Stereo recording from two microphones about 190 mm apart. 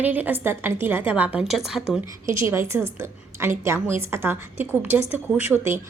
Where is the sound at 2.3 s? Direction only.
15° right (ahead or behind).